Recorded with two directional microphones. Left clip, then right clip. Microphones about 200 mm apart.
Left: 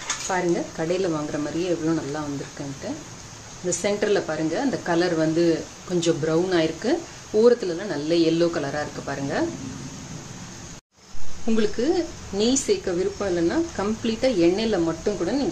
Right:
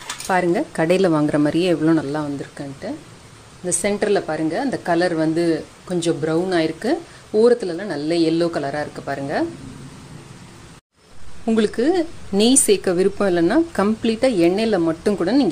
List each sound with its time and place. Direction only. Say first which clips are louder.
0.3 s speech: right 6 dB; 45° right (ahead or behind)
3.8 s speech: right 3 dB; 30° right (ahead or behind)
11.4 s speech: right 4 dB; 35° right (ahead or behind)